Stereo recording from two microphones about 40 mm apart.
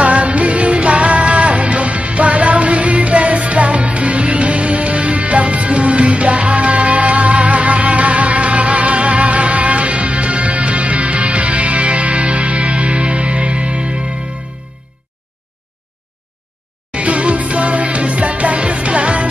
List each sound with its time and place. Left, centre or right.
0.0 s music: right
16.9 s music: right